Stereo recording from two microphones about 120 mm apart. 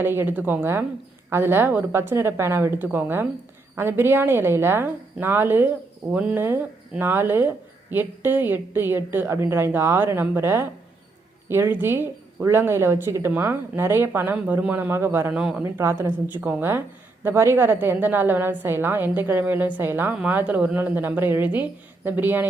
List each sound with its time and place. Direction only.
0.0 s a woman's voice: 20° right (ahead or behind)
15.3 s speech: 5° right (ahead or behind)
15.6 s speech: 20° right (ahead or behind)